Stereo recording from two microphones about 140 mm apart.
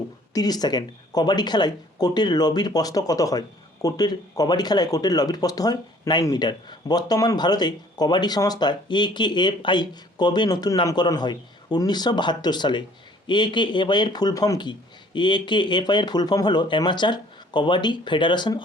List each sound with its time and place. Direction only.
0.3 s speech: 30° left (ahead or behind)